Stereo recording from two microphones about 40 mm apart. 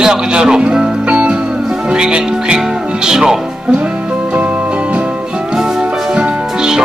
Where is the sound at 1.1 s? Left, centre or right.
Right.